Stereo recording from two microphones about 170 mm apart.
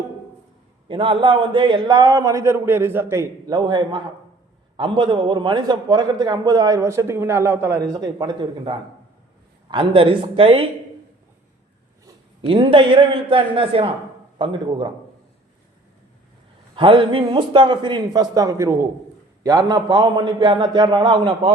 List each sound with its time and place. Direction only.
0.9 s a man's voice: 30° right (ahead or behind)
12.0 s a man's voice: 30° right (ahead or behind)
16.7 s a man's voice: 30° right (ahead or behind)